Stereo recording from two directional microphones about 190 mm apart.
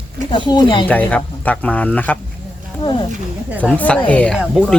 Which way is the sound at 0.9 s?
10° left (ahead or behind).